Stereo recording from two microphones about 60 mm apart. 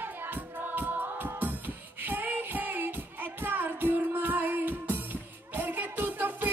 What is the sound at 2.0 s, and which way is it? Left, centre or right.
Music, right.